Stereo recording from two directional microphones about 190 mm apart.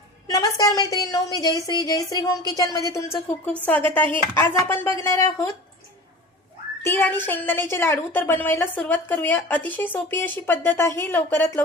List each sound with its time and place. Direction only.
0.3 s a woman's voice: 20° left (ahead or behind)
6.8 s a woman's voice: 10° left (ahead or behind)